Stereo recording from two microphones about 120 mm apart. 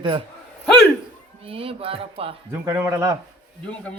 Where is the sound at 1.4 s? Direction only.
50° right (ahead or behind).